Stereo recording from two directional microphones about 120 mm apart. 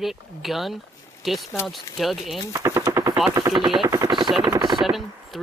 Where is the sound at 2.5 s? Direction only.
25° right (ahead or behind).